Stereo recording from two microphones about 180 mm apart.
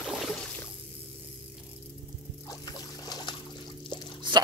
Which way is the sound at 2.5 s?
20° left (ahead or behind).